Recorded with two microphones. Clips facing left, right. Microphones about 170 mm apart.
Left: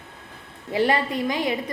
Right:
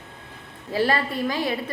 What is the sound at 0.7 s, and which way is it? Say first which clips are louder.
A woman's voice: left 1 dB; 20° left (ahead or behind).